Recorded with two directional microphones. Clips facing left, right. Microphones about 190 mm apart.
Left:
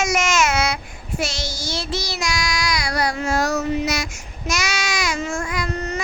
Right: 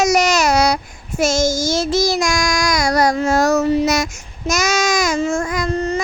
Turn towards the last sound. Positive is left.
turn(degrees=-30)  # may be behind; listen again after turning